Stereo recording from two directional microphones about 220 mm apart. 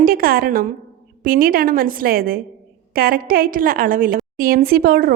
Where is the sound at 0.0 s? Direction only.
40° right (ahead or behind).